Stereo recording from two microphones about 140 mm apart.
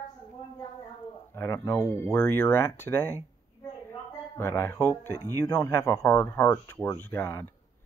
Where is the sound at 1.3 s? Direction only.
20° left (ahead or behind).